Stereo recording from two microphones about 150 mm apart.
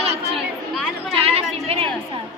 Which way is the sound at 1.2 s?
40° right (ahead or behind).